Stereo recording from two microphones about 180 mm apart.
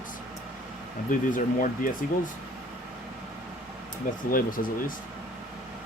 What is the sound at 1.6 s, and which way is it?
Speech, 50° left (ahead or behind).